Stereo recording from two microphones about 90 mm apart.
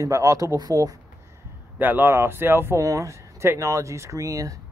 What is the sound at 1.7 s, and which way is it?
Speech, 20° right (ahead or behind).